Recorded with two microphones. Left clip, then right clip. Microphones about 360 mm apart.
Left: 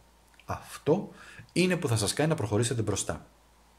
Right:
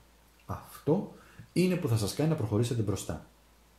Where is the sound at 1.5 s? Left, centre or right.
Left.